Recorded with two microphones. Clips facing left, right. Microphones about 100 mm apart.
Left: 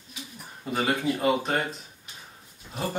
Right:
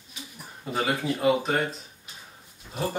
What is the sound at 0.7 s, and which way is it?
Speech, centre (ahead or behind).